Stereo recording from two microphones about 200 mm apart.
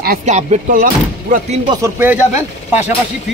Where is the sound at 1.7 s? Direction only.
15° right (ahead or behind).